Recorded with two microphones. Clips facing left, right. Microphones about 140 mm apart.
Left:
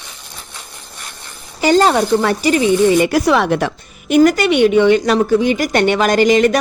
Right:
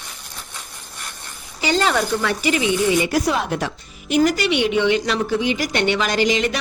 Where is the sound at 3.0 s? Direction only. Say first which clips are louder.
Left 7 dB; 65° left (ahead or behind).